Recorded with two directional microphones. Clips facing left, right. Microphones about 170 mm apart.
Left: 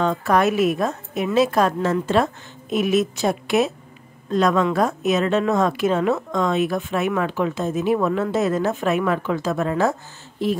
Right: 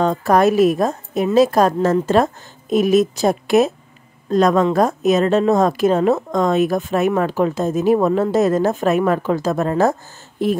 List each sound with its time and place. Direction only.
0.0 s a woman's voice: 40° right (ahead or behind)